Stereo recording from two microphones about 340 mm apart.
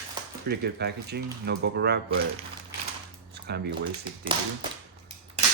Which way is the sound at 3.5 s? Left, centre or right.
Right.